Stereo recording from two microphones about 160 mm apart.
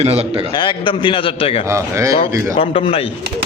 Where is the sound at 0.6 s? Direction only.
30° left (ahead or behind).